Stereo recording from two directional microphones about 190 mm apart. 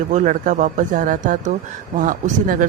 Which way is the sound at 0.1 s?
40° right (ahead or behind).